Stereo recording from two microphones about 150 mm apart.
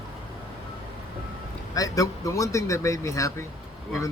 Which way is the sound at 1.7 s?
20° left (ahead or behind).